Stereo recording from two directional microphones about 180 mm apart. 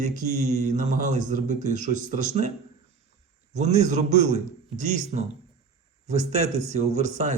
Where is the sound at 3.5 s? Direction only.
40° right (ahead or behind).